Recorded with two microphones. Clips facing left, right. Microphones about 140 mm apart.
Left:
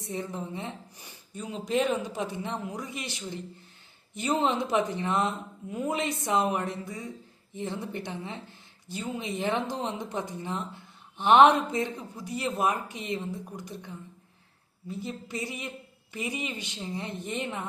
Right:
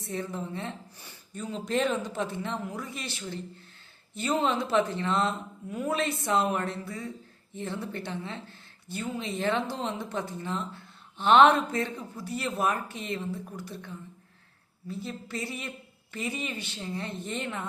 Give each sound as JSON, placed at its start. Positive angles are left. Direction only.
{"t": 0.0, "sound": "a woman's voice", "side_deg": 15}